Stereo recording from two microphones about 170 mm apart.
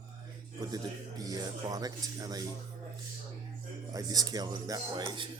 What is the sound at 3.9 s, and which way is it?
Speech, 20° right (ahead or behind).